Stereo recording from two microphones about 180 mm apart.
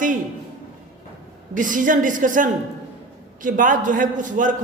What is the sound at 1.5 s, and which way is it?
A man's voice, 45° right (ahead or behind).